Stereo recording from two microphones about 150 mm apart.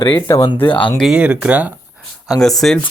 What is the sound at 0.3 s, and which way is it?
Speech, 25° left (ahead or behind).